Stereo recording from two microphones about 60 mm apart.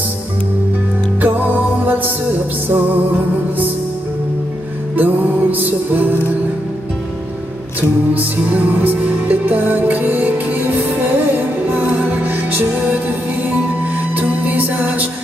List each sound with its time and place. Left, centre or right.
1.2 s music: right
4.9 s music: right
8.1 s music: right
14.1 s music: right